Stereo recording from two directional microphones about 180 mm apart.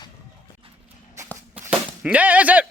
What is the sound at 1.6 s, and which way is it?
Whip, 10° right (ahead or behind).